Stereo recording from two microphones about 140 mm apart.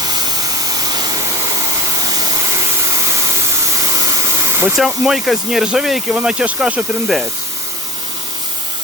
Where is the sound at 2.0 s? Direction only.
25° right (ahead or behind).